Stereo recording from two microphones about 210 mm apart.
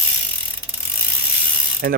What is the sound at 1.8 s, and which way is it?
Speech, 45° right (ahead or behind).